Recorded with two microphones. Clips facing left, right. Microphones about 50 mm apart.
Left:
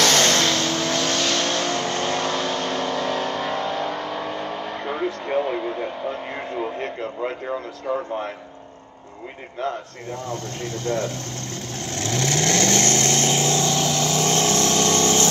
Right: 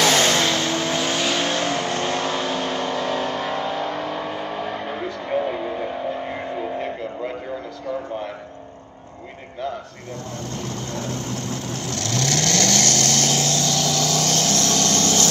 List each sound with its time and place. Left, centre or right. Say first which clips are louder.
0.0 s vehicle: right 1 dB; centre
11.9 s vehicle: left 1 dB; left